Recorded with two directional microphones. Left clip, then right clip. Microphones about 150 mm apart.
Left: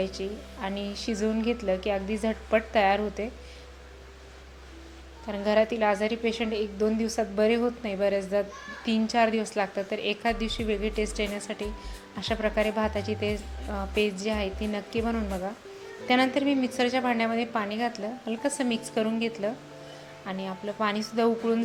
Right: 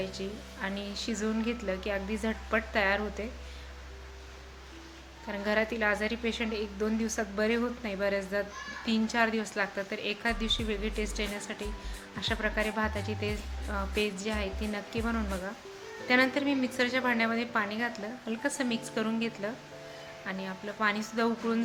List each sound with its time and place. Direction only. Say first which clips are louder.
0.0 s speech: left 5 dB; 20° left (ahead or behind)
5.3 s a woman's voice: left 6 dB; 20° left (ahead or behind)